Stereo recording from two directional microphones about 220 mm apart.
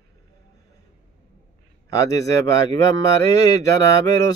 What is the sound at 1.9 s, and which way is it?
Speech, 15° left (ahead or behind).